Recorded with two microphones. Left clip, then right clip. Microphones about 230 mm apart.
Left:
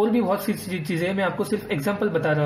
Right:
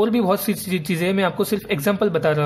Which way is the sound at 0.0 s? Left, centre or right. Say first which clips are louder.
Right 3 dB; right.